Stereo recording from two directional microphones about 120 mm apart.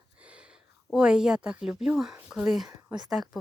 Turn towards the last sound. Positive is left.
turn(degrees=0)  # may be behind; listen again after turning